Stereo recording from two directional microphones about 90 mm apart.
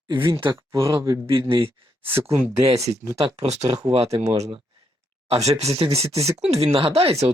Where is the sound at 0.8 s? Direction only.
45° right (ahead or behind).